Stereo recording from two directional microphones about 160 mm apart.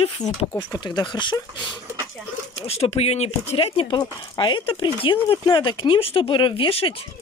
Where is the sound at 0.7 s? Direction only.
30° left (ahead or behind).